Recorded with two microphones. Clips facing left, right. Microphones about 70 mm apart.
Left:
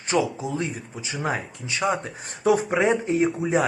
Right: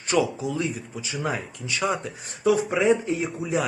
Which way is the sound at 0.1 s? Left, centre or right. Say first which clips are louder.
Even; left.